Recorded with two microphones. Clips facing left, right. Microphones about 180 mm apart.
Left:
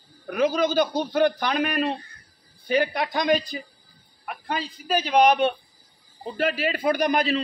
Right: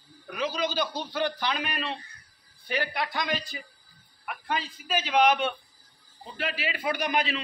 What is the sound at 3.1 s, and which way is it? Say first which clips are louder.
A man's voice: left 9 dB; 40° left (ahead or behind).